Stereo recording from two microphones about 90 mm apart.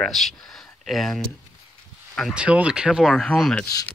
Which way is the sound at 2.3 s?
10° right (ahead or behind).